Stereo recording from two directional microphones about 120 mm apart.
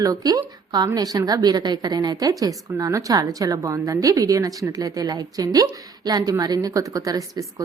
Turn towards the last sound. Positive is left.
turn(degrees=-30)  # may be behind; listen again after turning